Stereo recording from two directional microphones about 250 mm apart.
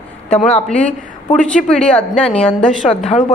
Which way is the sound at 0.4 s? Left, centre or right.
Centre.